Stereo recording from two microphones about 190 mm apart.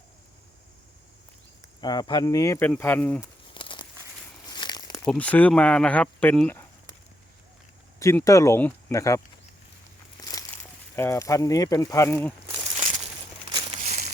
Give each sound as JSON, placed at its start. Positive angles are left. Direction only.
{"t": 1.8, "sound": "speech", "side_deg": 20}
{"t": 3.5, "sound": "crumpling", "side_deg": 25}
{"t": 5.0, "sound": "speech", "side_deg": 5}
{"t": 7.9, "sound": "speech", "side_deg": 15}
{"t": 10.2, "sound": "a sound", "side_deg": 20}
{"t": 13.5, "sound": "a sound", "side_deg": -25}